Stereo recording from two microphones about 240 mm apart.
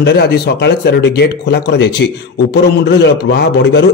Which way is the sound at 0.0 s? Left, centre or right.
Left.